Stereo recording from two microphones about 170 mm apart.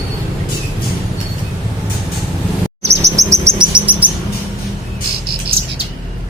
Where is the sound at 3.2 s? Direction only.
15° right (ahead or behind).